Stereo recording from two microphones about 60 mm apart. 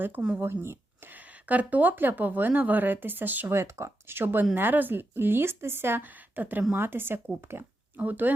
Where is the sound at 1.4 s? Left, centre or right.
Right.